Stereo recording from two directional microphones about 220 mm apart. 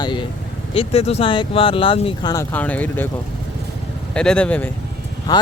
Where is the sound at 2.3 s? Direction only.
5° left (ahead or behind).